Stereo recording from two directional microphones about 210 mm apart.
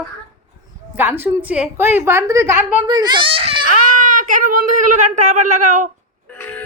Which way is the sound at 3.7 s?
40° right (ahead or behind).